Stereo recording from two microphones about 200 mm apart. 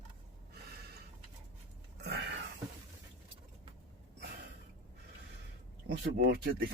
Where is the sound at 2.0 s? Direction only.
55° right (ahead or behind).